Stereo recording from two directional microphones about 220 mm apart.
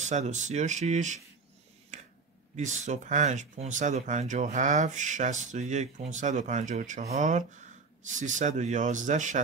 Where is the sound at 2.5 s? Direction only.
35° right (ahead or behind).